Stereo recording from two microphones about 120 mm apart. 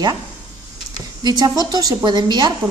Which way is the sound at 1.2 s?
35° right (ahead or behind).